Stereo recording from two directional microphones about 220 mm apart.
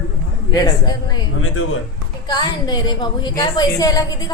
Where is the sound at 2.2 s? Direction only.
20° left (ahead or behind).